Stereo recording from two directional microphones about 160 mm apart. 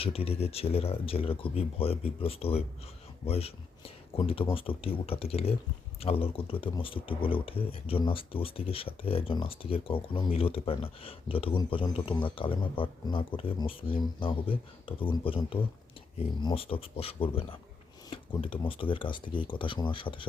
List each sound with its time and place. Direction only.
0.0 s speech: 35° left (ahead or behind)